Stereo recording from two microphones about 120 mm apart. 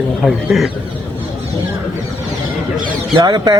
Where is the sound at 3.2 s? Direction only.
35° right (ahead or behind).